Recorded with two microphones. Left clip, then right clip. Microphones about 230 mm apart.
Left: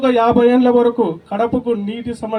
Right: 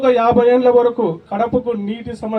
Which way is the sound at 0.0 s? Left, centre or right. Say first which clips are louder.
Even; left.